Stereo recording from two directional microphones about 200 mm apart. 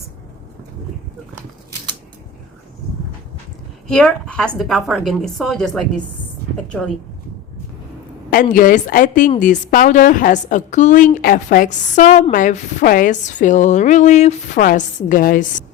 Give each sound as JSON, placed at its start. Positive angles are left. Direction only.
{"t": 3.8, "sound": "a woman's voice", "side_deg": 5}
{"t": 8.3, "sound": "a woman's voice", "side_deg": 45}